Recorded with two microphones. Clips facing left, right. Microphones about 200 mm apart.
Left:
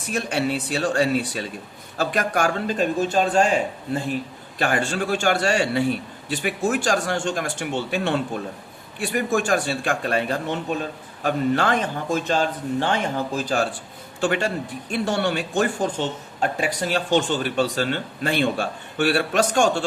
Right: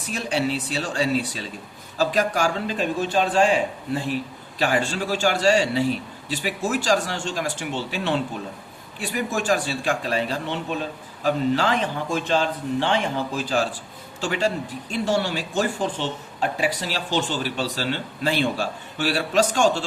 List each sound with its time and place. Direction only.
0.1 s speech: 60° left (ahead or behind)